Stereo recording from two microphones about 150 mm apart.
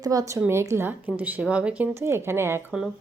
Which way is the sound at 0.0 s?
25° right (ahead or behind).